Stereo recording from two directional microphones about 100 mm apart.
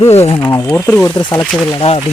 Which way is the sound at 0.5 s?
30° left (ahead or behind).